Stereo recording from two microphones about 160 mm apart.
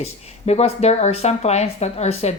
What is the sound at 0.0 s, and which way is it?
A woman's voice, 40° left (ahead or behind).